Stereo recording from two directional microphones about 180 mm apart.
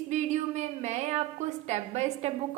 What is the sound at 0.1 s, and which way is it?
A woman's voice, 40° right (ahead or behind).